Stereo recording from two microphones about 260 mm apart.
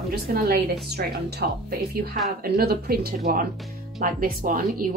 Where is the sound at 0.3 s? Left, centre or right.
Right.